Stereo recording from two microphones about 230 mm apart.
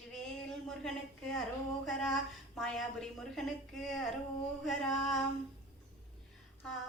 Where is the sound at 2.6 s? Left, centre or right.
Centre.